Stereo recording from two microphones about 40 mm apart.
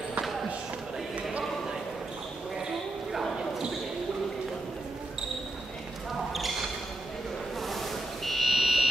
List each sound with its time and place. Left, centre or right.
3.1 s basketball bounce: centre
6.1 s basketball bounce: centre
7.6 s a sound: centre